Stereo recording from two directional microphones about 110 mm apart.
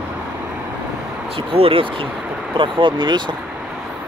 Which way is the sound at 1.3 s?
60° right (ahead or behind).